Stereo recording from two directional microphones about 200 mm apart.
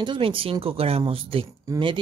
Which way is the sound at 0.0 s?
25° right (ahead or behind).